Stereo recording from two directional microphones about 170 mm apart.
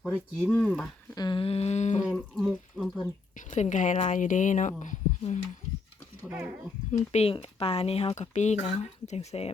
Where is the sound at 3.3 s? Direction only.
45° left (ahead or behind).